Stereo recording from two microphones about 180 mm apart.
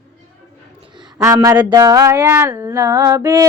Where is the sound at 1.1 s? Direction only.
20° right (ahead or behind).